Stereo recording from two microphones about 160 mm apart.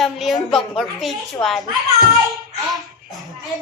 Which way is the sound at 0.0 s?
Centre (ahead or behind).